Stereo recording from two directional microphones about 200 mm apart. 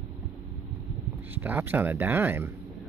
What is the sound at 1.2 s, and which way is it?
Speech, 10° right (ahead or behind).